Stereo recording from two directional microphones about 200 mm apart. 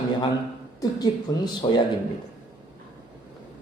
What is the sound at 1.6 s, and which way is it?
Speech, 25° left (ahead or behind).